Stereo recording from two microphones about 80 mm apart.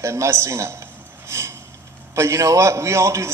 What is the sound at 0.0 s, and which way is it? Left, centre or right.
Speech, right.